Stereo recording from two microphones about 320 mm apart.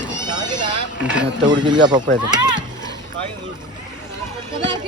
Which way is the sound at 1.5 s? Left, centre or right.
Centre.